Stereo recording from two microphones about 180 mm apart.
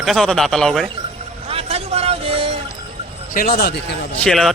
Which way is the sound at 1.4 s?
35° right (ahead or behind).